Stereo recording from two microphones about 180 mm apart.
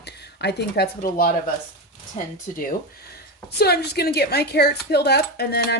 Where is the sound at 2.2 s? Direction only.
30° left (ahead or behind).